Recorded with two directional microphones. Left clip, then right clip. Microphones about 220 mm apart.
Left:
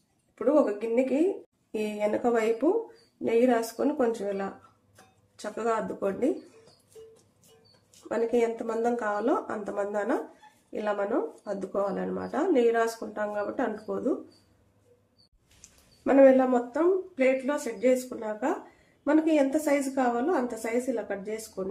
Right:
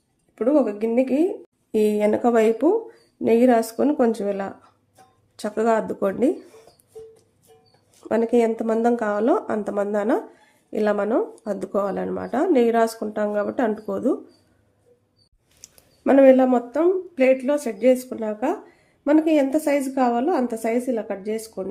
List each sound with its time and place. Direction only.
0.3 s speech: 50° right (ahead or behind)
8.0 s speech: 50° right (ahead or behind)
16.0 s speech: 45° right (ahead or behind)